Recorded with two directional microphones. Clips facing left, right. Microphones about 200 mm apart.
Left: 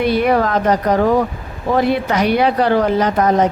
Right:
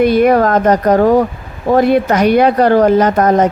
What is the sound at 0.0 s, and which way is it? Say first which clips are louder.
A woman's voice: right 5 dB; 45° right (ahead or behind).